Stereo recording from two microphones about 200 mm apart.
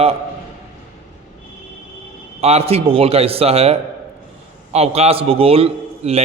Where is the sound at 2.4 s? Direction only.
30° right (ahead or behind).